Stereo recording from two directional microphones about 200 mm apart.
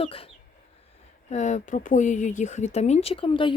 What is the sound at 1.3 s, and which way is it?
Speech, 35° left (ahead or behind).